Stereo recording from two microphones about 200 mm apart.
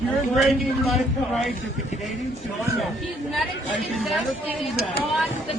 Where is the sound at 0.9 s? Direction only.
Centre (ahead or behind).